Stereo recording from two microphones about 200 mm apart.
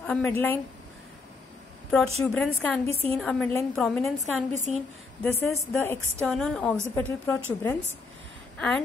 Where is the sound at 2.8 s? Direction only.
30° right (ahead or behind).